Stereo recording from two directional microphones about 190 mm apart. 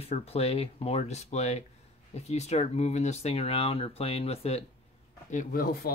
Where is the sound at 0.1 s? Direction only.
30° left (ahead or behind).